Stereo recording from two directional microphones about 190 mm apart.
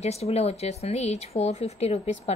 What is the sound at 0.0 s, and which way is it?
Speech, 35° left (ahead or behind).